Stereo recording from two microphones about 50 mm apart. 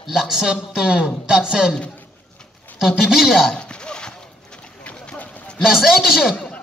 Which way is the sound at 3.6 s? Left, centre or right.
Centre.